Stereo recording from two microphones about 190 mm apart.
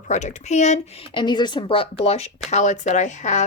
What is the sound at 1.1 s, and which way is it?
Speech, 25° left (ahead or behind).